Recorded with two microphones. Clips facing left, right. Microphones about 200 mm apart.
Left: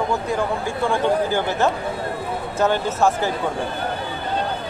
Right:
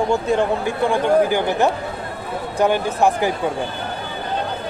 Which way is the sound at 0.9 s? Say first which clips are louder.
Right 4 dB; 15° right (ahead or behind).